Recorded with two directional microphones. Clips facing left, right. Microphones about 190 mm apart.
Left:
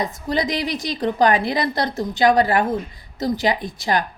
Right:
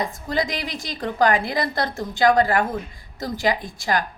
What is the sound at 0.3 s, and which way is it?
A woman's voice, 20° left (ahead or behind).